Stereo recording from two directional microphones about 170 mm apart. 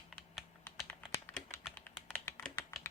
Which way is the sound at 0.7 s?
10° left (ahead or behind).